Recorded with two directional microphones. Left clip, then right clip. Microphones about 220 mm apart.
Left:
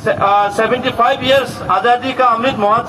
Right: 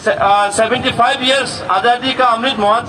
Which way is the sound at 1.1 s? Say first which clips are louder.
Left 1 dB; 15° left (ahead or behind).